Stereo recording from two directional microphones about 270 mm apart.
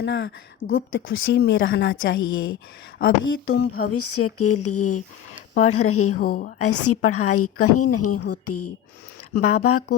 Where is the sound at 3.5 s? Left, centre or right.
Left.